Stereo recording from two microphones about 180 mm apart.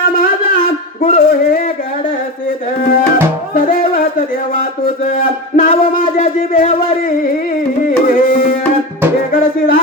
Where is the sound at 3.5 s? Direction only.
50° left (ahead or behind).